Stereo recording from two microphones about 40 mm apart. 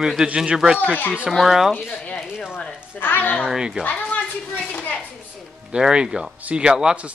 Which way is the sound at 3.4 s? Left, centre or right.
Centre.